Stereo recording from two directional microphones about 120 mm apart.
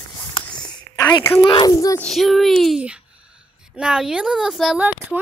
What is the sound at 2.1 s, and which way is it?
Speech, centre (ahead or behind).